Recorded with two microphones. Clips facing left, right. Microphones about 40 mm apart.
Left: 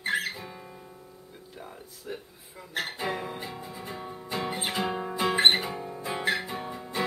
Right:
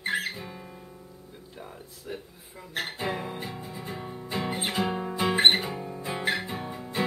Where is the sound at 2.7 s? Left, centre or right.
Centre.